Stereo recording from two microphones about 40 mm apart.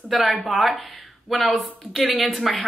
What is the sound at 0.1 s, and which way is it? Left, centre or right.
Speech, centre.